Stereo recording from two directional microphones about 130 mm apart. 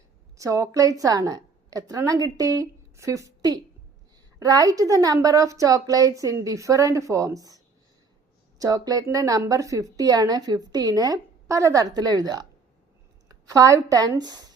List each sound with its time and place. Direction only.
0.3 s a woman's voice: 25° right (ahead or behind)